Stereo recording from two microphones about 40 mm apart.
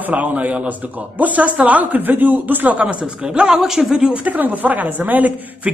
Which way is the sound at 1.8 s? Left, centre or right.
Right.